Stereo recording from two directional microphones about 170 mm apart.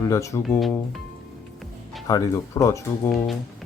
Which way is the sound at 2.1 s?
20° left (ahead or behind).